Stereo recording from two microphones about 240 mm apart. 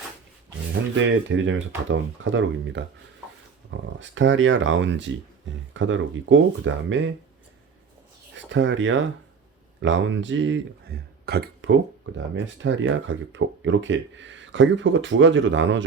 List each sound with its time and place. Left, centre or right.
0.9 s speech: right
8.3 s speech: right